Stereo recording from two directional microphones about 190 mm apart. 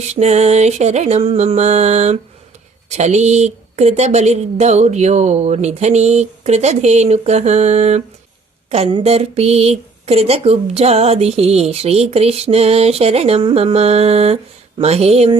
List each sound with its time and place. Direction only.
0.1 s speech: 35° right (ahead or behind)